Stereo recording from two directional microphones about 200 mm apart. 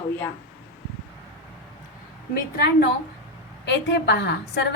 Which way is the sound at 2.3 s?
55° left (ahead or behind).